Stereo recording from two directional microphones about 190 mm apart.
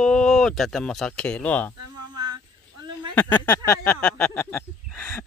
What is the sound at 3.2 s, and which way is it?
Speech, 10° left (ahead or behind).